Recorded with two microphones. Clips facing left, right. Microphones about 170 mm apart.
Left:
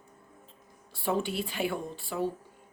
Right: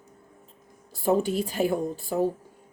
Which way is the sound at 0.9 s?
40° right (ahead or behind).